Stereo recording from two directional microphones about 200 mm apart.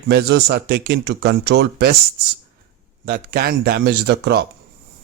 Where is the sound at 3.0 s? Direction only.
50° right (ahead or behind).